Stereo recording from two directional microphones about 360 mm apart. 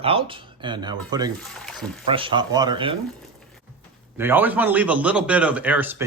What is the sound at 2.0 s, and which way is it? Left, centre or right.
Speech, centre.